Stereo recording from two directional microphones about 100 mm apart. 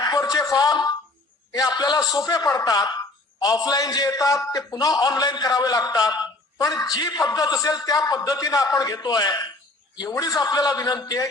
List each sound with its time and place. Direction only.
0.0 s a man's voice: 40° left (ahead or behind)